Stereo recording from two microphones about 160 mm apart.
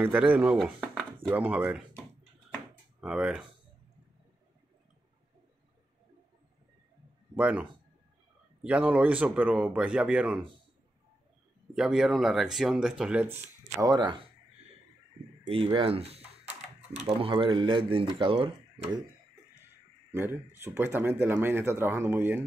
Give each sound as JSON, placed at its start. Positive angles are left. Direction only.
{"t": 0.0, "sound": "speech", "side_deg": -10}
{"t": 0.6, "sound": "speech", "side_deg": 0}
{"t": 3.0, "sound": "speech", "side_deg": -5}
{"t": 7.3, "sound": "speech", "side_deg": -10}
{"t": 8.6, "sound": "speech", "side_deg": -10}
{"t": 11.7, "sound": "speech", "side_deg": -5}
{"t": 13.7, "sound": "speech", "side_deg": -25}
{"t": 15.4, "sound": "speech", "side_deg": -35}
{"t": 20.1, "sound": "speech", "side_deg": -15}